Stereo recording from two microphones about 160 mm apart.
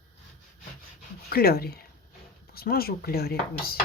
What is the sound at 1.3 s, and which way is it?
Speech, 70° left (ahead or behind).